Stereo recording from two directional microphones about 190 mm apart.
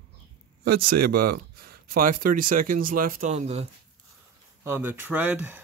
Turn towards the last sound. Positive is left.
turn(degrees=-10)  # may be behind; listen again after turning